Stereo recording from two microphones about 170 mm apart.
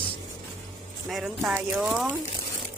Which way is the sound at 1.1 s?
Centre (ahead or behind).